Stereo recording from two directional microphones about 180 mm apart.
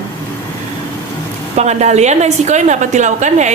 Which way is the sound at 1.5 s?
40° right (ahead or behind).